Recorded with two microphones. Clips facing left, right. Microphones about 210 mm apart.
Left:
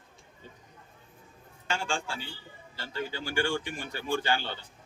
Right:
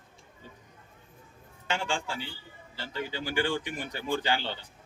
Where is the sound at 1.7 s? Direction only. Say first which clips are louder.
Right 1 dB; 20° right (ahead or behind).